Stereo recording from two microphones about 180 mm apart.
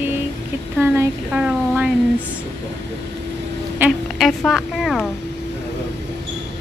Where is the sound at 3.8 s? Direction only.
Centre (ahead or behind).